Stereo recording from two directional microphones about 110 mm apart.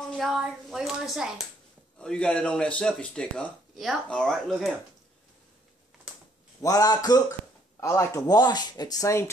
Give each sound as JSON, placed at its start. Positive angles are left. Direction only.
{"t": 0.1, "sound": "speech", "side_deg": 0}
{"t": 2.0, "sound": "speech", "side_deg": 10}
{"t": 6.6, "sound": "speech", "side_deg": 35}